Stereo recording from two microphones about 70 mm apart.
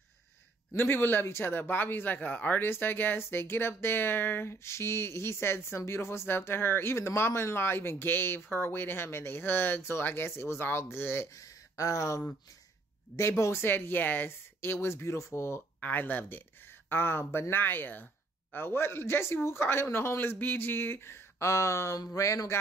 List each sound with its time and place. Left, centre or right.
0.7 s speech: left
11.3 s speech: left
13.2 s speech: left
13.7 s speech: left
15.8 s speech: left